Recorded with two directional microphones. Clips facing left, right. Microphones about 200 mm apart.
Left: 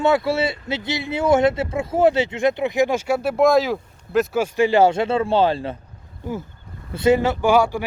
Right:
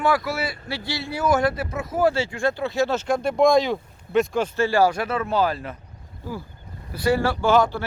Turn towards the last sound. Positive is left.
turn(degrees=10)  # may be behind; listen again after turning